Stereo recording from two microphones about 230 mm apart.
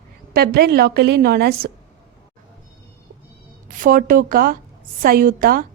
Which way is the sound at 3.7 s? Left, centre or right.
Right.